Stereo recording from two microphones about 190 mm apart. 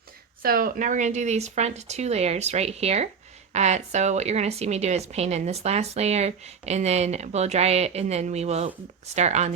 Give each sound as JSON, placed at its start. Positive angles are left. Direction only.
{"t": 0.4, "sound": "a woman's voice", "side_deg": -50}